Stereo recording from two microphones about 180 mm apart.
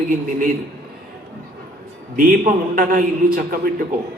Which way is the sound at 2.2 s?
50° right (ahead or behind).